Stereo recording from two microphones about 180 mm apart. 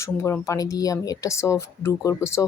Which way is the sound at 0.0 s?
15° left (ahead or behind).